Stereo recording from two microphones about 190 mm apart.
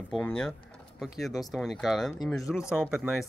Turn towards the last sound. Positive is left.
turn(degrees=-5)  # may be behind; listen again after turning